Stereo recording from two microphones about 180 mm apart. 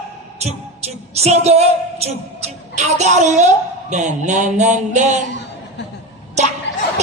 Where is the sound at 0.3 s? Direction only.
35° right (ahead or behind).